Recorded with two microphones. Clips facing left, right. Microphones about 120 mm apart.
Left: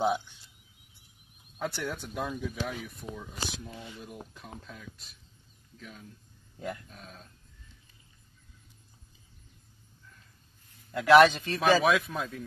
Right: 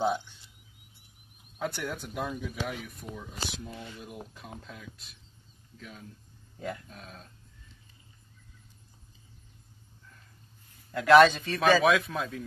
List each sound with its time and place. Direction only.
1.6 s speech: centre (ahead or behind)
10.9 s speech: 5° left (ahead or behind)